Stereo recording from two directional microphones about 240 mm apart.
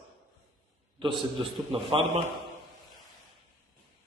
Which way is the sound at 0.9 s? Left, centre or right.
Centre.